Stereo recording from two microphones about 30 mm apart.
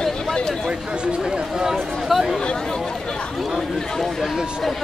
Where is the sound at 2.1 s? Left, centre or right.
Centre.